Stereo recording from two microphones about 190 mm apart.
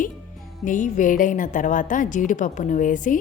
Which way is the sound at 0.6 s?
45° left (ahead or behind).